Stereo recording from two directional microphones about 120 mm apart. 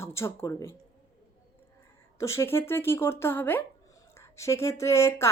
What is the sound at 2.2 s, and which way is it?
A woman's voice, 25° left (ahead or behind).